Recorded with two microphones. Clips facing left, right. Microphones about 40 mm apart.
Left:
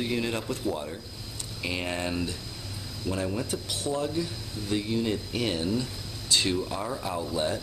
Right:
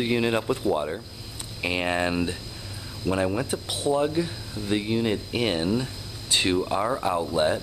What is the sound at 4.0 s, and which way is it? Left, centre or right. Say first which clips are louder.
Speech: right 5 dB; right.